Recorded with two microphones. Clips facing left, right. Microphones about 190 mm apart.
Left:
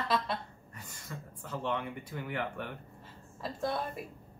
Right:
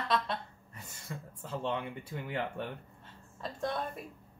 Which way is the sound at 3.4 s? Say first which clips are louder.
Left 1 dB; 5° left (ahead or behind).